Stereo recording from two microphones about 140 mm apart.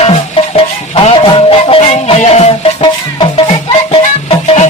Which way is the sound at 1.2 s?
40° left (ahead or behind).